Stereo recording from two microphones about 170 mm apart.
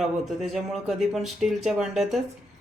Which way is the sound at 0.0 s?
Centre (ahead or behind).